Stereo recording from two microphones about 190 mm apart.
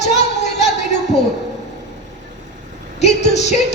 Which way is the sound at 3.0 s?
35° left (ahead or behind).